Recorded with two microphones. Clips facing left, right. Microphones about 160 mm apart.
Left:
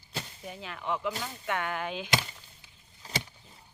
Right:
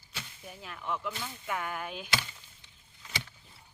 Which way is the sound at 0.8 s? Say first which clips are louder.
Left 3 dB; 5° left (ahead or behind).